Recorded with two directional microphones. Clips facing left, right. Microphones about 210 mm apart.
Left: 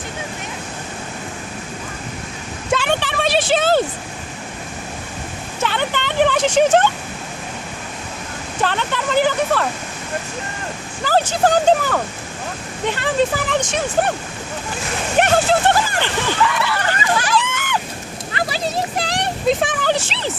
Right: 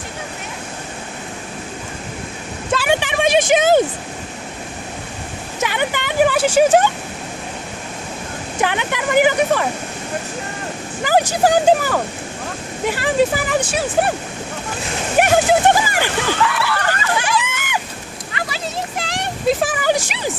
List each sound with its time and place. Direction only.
2.7 s a sound: 10° right (ahead or behind)
5.6 s a sound: 10° right (ahead or behind)
8.6 s speech: 15° right (ahead or behind)
11.0 s speech: 15° right (ahead or behind)
15.2 s speech: 10° right (ahead or behind)
16.7 s hubbub: 15° left (ahead or behind)
17.2 s hubbub: 10° right (ahead or behind)
18.3 s a sound: 35° left (ahead or behind)
19.5 s speech: 5° right (ahead or behind)